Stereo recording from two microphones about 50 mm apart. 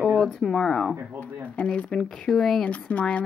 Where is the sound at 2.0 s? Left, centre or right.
Centre.